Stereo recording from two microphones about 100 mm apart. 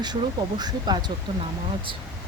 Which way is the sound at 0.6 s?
45° right (ahead or behind).